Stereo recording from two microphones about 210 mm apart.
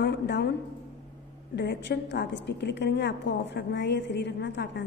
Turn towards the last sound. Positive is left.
turn(degrees=55)  # may be behind; listen again after turning